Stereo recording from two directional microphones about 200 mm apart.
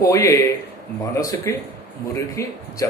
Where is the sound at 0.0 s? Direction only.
15° left (ahead or behind).